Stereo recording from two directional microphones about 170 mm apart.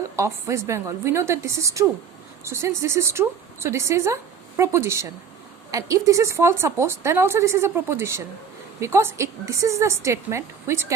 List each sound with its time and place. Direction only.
0.2 s a woman's voice: 15° right (ahead or behind)